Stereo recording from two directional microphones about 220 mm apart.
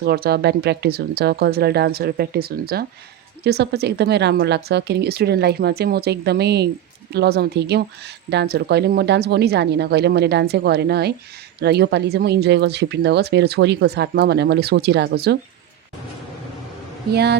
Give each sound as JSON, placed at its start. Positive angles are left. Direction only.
{"t": 0.0, "sound": "a woman's voice", "side_deg": -45}
{"t": 17.1, "sound": "a woman's voice", "side_deg": -45}